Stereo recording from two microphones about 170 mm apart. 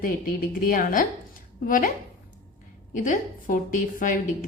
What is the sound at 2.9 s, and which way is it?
A woman's voice, 55° left (ahead or behind).